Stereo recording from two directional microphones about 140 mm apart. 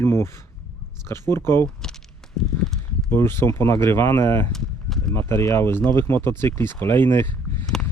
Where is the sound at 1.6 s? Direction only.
5° left (ahead or behind).